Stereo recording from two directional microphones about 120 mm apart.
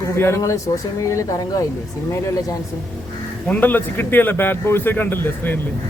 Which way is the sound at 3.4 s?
15° left (ahead or behind).